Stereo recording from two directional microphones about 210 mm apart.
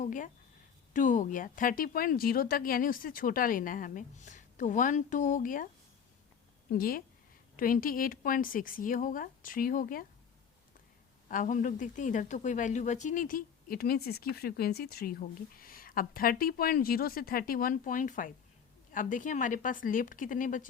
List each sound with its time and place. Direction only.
0.0 s speech: 40° left (ahead or behind)
6.7 s a woman's voice: 45° left (ahead or behind)
11.3 s a woman's voice: 40° left (ahead or behind)